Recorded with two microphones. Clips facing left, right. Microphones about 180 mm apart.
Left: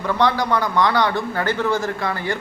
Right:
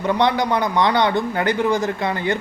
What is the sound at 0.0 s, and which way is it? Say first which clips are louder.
Speech: right 1 dB; 20° right (ahead or behind).